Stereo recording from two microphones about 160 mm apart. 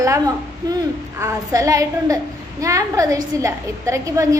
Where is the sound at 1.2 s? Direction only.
20° right (ahead or behind).